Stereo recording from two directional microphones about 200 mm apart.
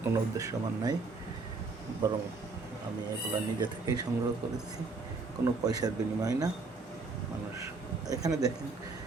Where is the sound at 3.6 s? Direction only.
20° right (ahead or behind).